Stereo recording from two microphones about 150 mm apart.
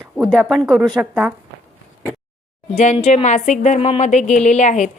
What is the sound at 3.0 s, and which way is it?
A woman's voice, 50° left (ahead or behind).